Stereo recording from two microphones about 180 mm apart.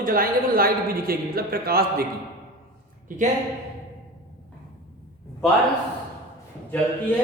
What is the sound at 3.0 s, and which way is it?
Speech, 45° right (ahead or behind).